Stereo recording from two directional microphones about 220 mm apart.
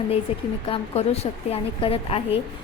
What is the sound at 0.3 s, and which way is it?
A woman's voice, 25° left (ahead or behind).